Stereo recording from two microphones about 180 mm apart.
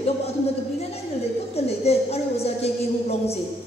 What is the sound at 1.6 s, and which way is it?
A woman's voice, 35° left (ahead or behind).